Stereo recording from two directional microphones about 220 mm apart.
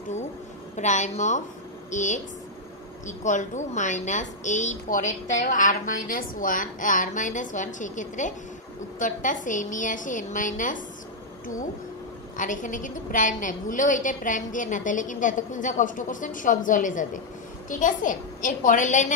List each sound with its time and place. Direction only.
0.7 s a woman's voice: 30° left (ahead or behind)
12.4 s a woman's voice: 35° left (ahead or behind)